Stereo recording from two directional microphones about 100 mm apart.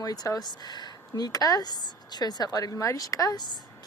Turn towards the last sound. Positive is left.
turn(degrees=35)  # may be behind; listen again after turning